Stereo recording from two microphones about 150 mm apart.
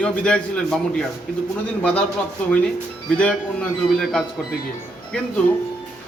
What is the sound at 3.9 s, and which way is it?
Speech, centre (ahead or behind).